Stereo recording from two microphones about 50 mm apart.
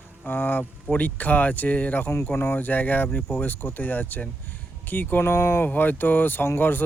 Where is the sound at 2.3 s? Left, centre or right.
Left.